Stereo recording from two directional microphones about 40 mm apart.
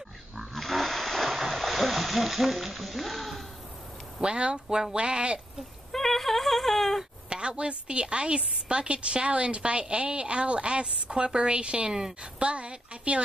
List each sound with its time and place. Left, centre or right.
0.6 s splash: centre
4.2 s a woman's voice: right
5.9 s a sound: centre
7.2 s a woman's voice: right